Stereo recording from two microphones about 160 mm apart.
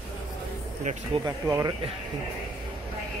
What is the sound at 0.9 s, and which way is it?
Speech, 50° right (ahead or behind).